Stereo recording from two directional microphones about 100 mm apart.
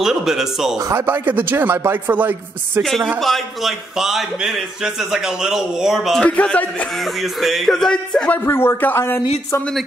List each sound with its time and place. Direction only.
0.0 s a man's voice: 5° right (ahead or behind)
0.7 s speech: 35° right (ahead or behind)
1.0 s speech: 20° right (ahead or behind)
2.8 s a man's voice: centre (ahead or behind)
6.2 s a man's voice: 15° left (ahead or behind)
7.2 s a man's voice: centre (ahead or behind)
8.5 s a man's voice: 25° left (ahead or behind)